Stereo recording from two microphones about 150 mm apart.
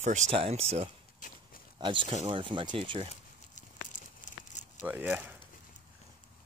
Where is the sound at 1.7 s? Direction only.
35° right (ahead or behind).